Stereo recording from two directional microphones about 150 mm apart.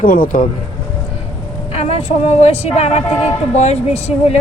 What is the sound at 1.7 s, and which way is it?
A woman's voice, 45° left (ahead or behind).